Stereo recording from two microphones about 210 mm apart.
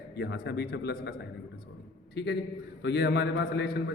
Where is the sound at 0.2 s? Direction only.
50° left (ahead or behind).